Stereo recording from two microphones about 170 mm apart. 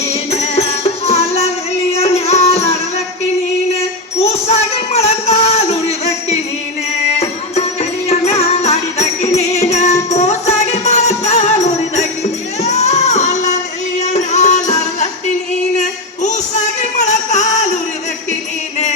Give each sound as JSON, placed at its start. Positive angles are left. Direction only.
{"t": 0.4, "sound": "music", "side_deg": 40}
{"t": 3.8, "sound": "music", "side_deg": 40}
{"t": 7.2, "sound": "music", "side_deg": 40}
{"t": 16.8, "sound": "music", "side_deg": 40}